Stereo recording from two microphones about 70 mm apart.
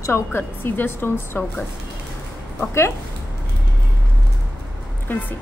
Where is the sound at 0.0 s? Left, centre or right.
Left.